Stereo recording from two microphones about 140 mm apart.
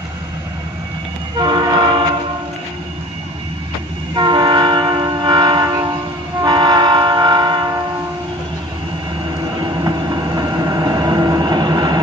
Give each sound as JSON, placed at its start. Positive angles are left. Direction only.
{"t": 1.4, "sound": "train", "side_deg": -30}
{"t": 4.1, "sound": "train", "side_deg": -30}
{"t": 9.6, "sound": "train", "side_deg": -30}